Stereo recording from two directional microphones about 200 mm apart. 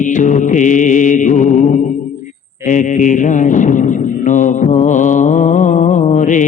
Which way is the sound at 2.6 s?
40° left (ahead or behind).